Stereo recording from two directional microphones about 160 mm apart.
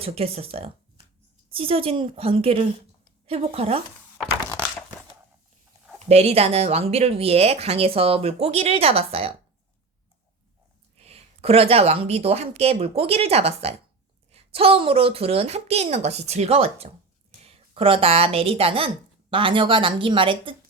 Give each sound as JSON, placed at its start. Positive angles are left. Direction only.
{"t": 0.0, "sound": "speech", "side_deg": -35}
{"t": 6.1, "sound": "speech", "side_deg": -40}
{"t": 10.9, "sound": "a woman's voice", "side_deg": -40}